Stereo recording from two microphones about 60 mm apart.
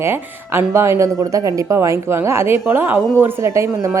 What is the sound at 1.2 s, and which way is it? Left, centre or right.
A woman's voice, right.